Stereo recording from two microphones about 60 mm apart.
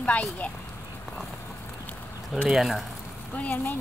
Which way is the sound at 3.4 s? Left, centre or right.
Left.